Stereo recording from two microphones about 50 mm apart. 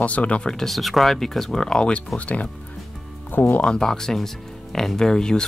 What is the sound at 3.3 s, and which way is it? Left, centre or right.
Speech, left.